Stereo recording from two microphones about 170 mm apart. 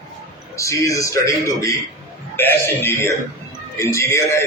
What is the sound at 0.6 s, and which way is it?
A man's voice, 20° left (ahead or behind).